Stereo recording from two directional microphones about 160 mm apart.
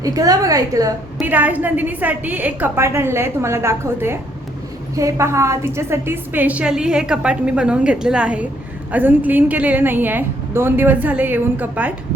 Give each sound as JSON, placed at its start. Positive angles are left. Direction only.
{"t": 0.0, "sound": "a woman's voice", "side_deg": -20}
{"t": 1.2, "sound": "a woman's voice", "side_deg": -10}